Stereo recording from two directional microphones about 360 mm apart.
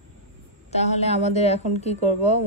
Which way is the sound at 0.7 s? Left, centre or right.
Centre.